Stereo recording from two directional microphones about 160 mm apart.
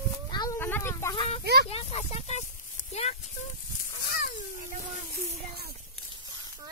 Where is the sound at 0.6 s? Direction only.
15° left (ahead or behind).